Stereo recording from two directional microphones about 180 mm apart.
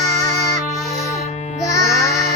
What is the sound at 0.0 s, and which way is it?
Music, 20° left (ahead or behind).